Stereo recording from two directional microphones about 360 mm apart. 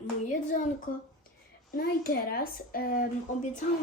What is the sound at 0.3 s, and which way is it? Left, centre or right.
Speech, left.